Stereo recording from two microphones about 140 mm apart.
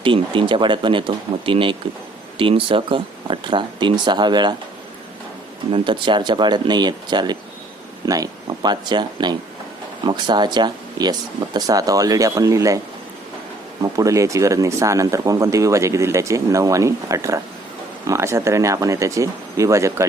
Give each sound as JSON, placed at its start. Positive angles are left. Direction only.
{"t": 0.0, "sound": "speech", "side_deg": -35}
{"t": 5.7, "sound": "speech", "side_deg": -35}
{"t": 13.9, "sound": "speech", "side_deg": -25}